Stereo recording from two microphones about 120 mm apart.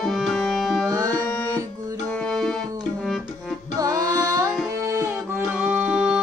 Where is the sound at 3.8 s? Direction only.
30° right (ahead or behind).